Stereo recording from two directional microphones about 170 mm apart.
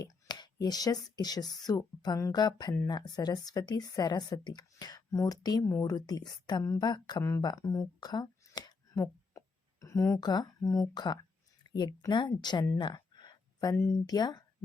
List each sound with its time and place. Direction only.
0.0 s speech: 25° left (ahead or behind)